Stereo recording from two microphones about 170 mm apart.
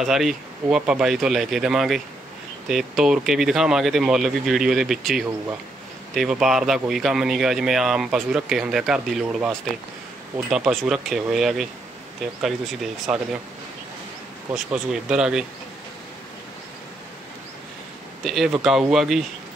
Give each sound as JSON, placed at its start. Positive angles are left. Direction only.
{"t": 0.0, "sound": "speech", "side_deg": 0}
{"t": 14.5, "sound": "speech", "side_deg": -5}
{"t": 18.2, "sound": "speech", "side_deg": 0}